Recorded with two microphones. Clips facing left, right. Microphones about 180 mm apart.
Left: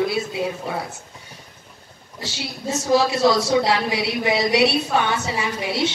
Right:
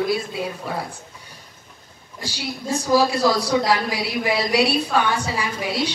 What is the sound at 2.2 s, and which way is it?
A woman's voice, 25° left (ahead or behind).